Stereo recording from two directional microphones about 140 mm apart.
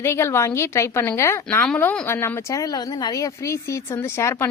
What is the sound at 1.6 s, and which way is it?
A woman's voice, 10° left (ahead or behind).